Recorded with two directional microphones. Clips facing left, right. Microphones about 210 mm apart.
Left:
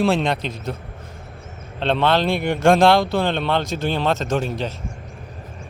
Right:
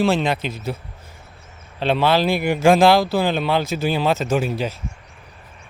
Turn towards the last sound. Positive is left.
turn(degrees=-5)  # may be behind; listen again after turning